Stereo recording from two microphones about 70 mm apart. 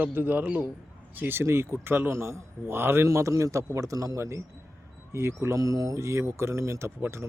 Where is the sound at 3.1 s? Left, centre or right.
Right.